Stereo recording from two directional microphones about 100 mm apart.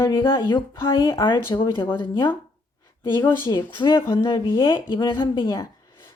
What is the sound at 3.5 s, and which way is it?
Speech, 45° left (ahead or behind).